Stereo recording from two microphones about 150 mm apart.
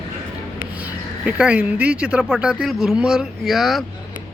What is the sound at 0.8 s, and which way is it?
Speech, 10° right (ahead or behind).